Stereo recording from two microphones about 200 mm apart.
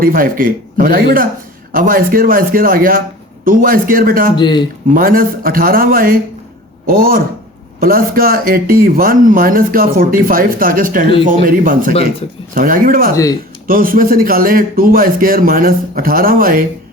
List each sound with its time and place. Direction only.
0.0 s a man's voice: 45° right (ahead or behind)
4.4 s speech: 20° left (ahead or behind)
4.9 s a man's voice: 45° right (ahead or behind)